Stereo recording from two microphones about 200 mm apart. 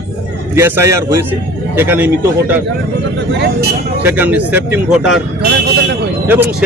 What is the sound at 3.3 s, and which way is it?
Speech, 60° right (ahead or behind).